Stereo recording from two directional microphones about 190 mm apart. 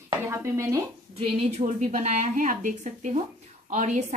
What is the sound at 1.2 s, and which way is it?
A woman's voice, 35° right (ahead or behind).